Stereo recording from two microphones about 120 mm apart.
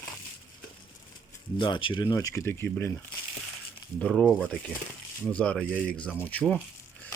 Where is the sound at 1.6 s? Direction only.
45° left (ahead or behind); by 2.9 s 20° left (ahead or behind).